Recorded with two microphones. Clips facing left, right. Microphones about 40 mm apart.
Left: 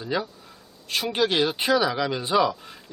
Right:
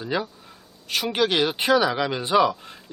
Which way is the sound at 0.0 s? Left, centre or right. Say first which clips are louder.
Right 1 dB; centre.